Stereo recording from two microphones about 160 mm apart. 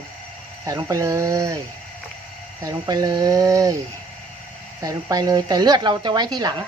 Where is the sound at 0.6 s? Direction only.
20° right (ahead or behind).